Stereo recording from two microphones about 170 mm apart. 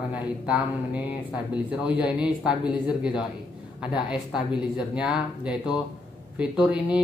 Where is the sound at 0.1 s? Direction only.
5° right (ahead or behind).